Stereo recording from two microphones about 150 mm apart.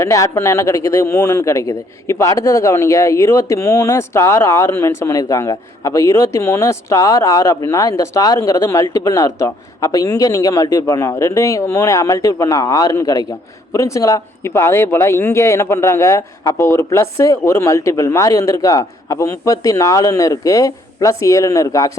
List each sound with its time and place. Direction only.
0.0 s a man's voice: 20° left (ahead or behind)